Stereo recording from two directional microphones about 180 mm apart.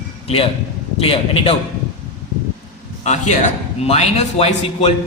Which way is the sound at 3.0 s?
40° left (ahead or behind).